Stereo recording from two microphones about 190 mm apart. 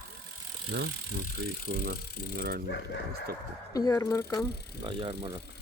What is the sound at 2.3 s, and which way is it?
Speech, 50° right (ahead or behind).